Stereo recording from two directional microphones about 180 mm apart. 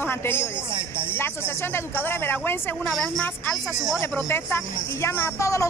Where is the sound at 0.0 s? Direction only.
10° left (ahead or behind).